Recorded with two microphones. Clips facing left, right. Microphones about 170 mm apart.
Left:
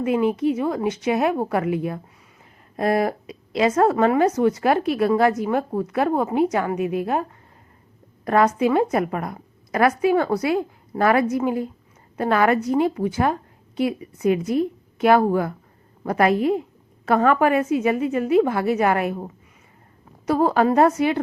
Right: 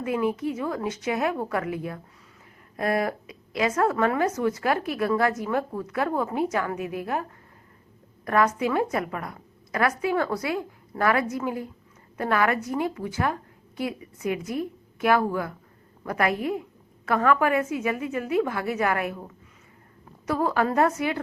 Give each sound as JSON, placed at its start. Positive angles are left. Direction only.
{"t": 0.0, "sound": "a woman's voice", "side_deg": 20}
{"t": 20.2, "sound": "a woman's voice", "side_deg": 30}